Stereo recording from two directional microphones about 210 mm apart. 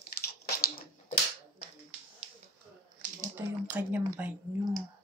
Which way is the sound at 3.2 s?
10° right (ahead or behind).